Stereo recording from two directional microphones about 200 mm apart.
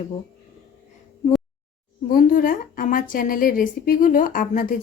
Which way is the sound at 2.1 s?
45° left (ahead or behind).